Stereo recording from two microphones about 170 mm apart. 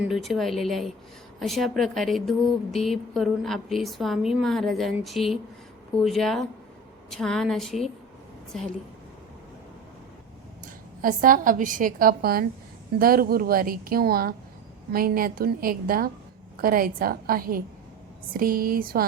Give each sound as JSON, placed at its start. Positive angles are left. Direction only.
{"t": 0.0, "sound": "a woman's voice", "side_deg": 0}
{"t": 11.0, "sound": "a woman's voice", "side_deg": -55}